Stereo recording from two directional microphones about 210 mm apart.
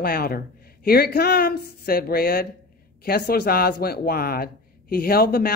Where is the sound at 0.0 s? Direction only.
45° left (ahead or behind).